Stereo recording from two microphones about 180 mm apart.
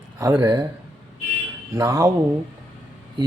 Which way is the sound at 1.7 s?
15° right (ahead or behind).